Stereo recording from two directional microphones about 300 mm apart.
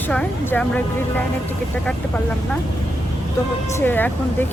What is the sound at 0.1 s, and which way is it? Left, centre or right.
Speech, centre.